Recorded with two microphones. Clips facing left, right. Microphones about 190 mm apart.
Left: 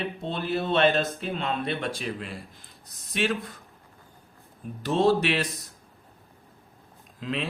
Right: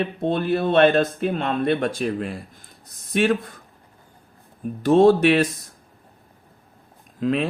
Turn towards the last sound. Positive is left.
turn(degrees=-50)  # may be behind; listen again after turning